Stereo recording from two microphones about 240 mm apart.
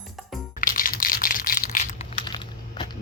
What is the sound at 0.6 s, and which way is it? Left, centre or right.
Crushing, left.